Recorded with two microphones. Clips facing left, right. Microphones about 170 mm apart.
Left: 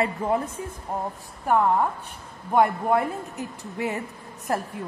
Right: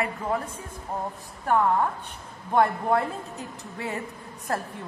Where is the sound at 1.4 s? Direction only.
15° left (ahead or behind).